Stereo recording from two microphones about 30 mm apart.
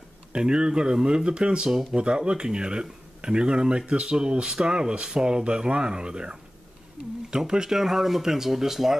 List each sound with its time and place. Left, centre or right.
0.3 s speech: right
1.7 s speech: centre
2.0 s speech: right
7.7 s speech: centre